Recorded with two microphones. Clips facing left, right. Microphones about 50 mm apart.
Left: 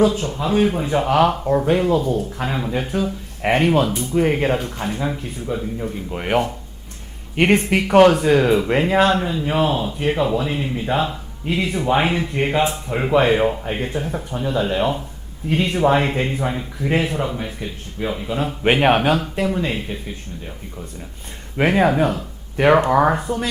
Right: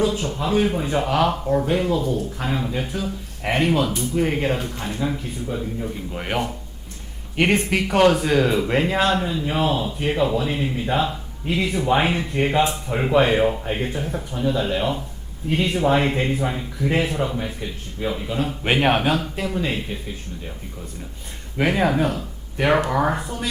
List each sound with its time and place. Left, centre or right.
0.0 s speech: left; by 6.5 s centre
7.3 s speech: left; by 9.0 s centre
9.0 s speech: left
9.3 s speech: centre
15.4 s speech: left
15.7 s speech: centre
21.6 s speech: centre
23.2 s speech: left